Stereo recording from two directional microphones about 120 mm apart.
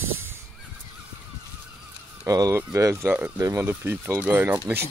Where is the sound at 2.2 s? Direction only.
30° right (ahead or behind).